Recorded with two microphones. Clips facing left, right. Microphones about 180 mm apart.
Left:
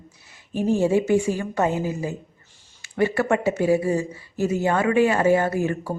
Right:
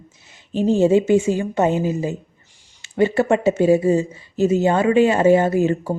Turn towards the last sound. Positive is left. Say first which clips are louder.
# right 6 dB
turn(degrees=-25)  # may be behind; listen again after turning